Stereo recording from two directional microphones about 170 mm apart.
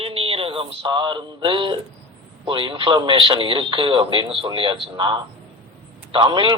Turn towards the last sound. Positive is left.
turn(degrees=-30)  # may be behind; listen again after turning